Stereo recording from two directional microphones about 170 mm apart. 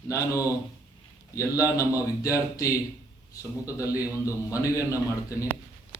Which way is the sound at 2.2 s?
20° left (ahead or behind).